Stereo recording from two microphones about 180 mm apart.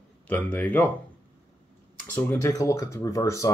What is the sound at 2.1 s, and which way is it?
Speech, 10° left (ahead or behind).